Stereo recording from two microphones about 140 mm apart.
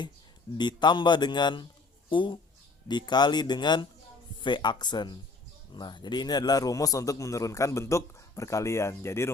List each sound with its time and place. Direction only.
0.5 s a man's voice: 30° left (ahead or behind)